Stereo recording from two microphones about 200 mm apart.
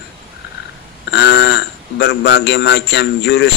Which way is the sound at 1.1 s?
60° left (ahead or behind).